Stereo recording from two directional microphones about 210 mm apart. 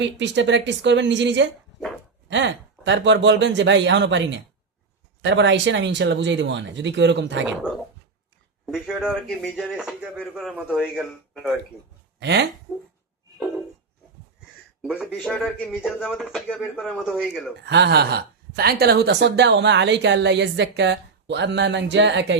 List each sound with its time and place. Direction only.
0.0 s speech: 60° right (ahead or behind)
8.6 s speech: 5° right (ahead or behind)
12.2 s speech: 55° right (ahead or behind)
14.8 s speech: 5° right (ahead or behind)
17.6 s speech: 55° right (ahead or behind)